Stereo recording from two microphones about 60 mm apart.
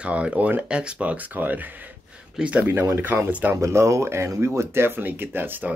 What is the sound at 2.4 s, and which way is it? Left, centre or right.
Speech, centre.